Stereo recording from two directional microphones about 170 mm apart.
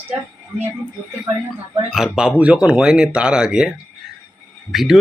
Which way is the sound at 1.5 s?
Centre (ahead or behind).